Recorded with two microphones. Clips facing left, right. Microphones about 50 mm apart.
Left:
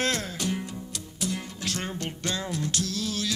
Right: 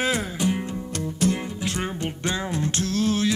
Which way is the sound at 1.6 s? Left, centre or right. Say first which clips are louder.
Right 3 dB; centre.